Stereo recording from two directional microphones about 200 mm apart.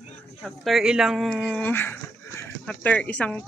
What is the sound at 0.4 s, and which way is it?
Speech, centre (ahead or behind).